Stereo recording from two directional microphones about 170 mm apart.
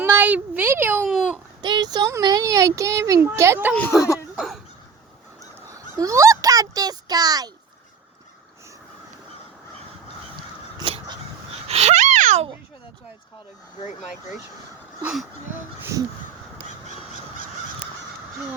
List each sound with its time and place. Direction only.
0.0 s speech: 10° right (ahead or behind)
1.0 s speech: centre (ahead or behind)
1.6 s a child's voice: 25° right (ahead or behind)
3.8 s speech: 15° left (ahead or behind)
4.4 s a sound: centre (ahead or behind)
5.6 s a sound: 20° right (ahead or behind)
10.8 s crow: 30° right (ahead or behind)
11.7 s a sound: 40° right (ahead or behind)
15.0 s speech: centre (ahead or behind)
15.5 s a child's voice: 15° right (ahead or behind)